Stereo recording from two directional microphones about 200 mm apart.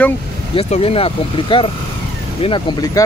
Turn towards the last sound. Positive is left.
turn(degrees=20)  # may be behind; listen again after turning